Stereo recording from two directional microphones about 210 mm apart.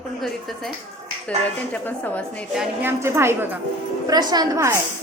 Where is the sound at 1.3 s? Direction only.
5° left (ahead or behind).